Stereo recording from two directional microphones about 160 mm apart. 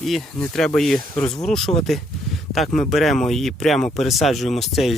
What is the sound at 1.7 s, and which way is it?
Speech, 25° left (ahead or behind).